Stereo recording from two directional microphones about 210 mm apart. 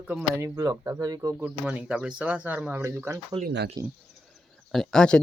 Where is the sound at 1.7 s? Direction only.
5° right (ahead or behind).